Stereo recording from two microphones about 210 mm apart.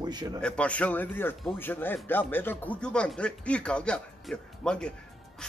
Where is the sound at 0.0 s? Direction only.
20° right (ahead or behind).